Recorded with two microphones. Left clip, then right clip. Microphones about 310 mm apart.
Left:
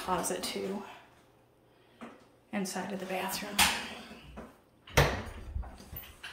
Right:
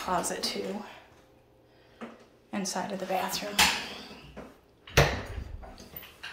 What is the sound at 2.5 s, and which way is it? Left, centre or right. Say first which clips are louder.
Speech: right 3 dB; centre.